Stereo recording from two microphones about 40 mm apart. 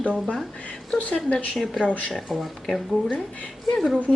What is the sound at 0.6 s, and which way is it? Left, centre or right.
Speech, left.